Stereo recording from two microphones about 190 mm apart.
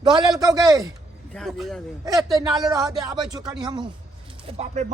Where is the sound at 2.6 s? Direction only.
20° right (ahead or behind).